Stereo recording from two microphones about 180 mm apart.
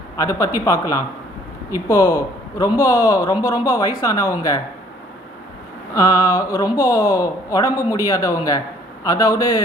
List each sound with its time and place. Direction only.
0.2 s a man's voice: 20° left (ahead or behind)
5.9 s speech: 20° left (ahead or behind)